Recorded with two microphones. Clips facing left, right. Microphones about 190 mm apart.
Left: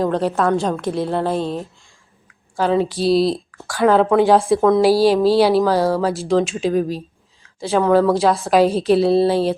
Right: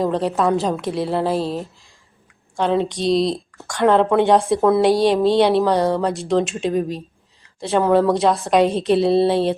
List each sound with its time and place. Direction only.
0.0 s speech: centre (ahead or behind)